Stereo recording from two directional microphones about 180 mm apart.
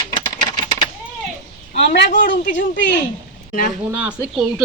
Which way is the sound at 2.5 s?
80° left.